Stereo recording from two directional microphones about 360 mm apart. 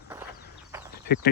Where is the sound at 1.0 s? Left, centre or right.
Left.